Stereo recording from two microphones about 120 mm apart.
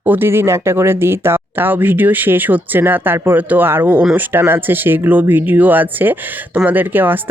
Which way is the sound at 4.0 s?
5° right (ahead or behind).